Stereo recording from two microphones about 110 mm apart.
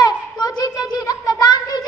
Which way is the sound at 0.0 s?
40° left (ahead or behind).